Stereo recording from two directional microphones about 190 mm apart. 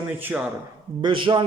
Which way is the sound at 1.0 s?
25° right (ahead or behind).